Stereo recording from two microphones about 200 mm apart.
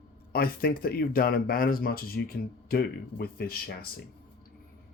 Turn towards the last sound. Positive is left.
turn(degrees=50)  # may be behind; listen again after turning